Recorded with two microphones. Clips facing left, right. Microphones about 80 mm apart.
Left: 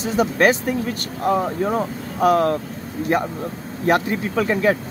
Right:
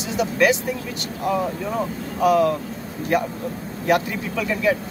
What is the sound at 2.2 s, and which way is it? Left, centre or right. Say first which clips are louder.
Speech: left 1 dB; left.